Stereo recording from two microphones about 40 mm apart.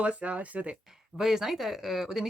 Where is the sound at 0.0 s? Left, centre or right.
Right.